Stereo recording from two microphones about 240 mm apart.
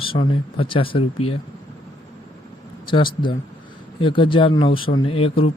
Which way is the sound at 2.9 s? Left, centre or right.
Centre.